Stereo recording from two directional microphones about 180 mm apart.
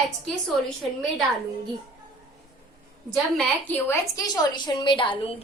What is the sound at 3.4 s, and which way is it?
A woman's voice, 10° left (ahead or behind).